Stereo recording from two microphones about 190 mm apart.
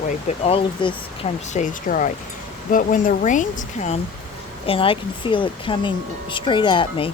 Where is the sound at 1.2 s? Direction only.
40° left (ahead or behind).